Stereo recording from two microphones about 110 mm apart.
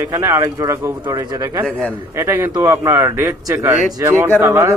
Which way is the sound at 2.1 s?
25° right (ahead or behind).